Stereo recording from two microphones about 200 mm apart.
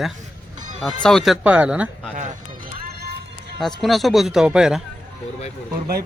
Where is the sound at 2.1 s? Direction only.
45° right (ahead or behind).